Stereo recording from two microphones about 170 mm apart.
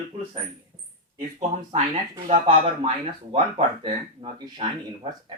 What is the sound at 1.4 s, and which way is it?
Speech, 40° right (ahead or behind).